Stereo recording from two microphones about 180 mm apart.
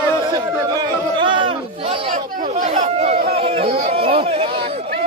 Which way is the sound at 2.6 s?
40° right (ahead or behind).